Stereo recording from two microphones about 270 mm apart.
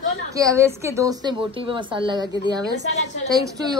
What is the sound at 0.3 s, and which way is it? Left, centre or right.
A woman's voice, centre.